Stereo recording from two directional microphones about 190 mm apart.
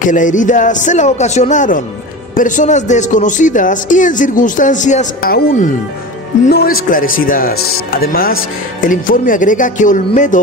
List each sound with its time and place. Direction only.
0.0 s a man's voice: 40° left (ahead or behind)